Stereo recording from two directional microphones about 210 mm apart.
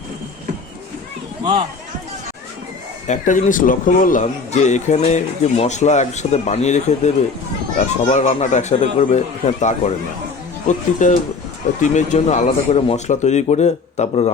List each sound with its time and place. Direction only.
3.1 s speech: 35° left (ahead or behind)
8.1 s speech: 35° left (ahead or behind)